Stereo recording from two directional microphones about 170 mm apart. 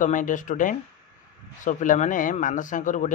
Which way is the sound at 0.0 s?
50° left (ahead or behind).